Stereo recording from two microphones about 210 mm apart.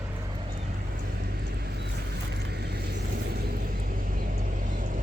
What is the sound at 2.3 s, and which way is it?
Vehicle, 50° right (ahead or behind).